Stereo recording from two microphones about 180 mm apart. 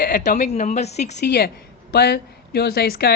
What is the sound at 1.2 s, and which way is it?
Speech, 65° left (ahead or behind).